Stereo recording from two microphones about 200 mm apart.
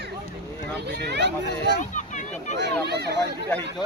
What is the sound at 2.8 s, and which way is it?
Speech, 55° right (ahead or behind).